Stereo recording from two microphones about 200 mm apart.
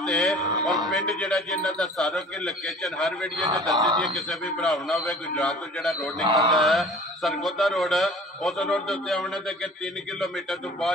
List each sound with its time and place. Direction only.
0.0 s a man's voice: 5° left (ahead or behind)
6.2 s chant: 25° right (ahead or behind)
6.5 s a man's voice: centre (ahead or behind)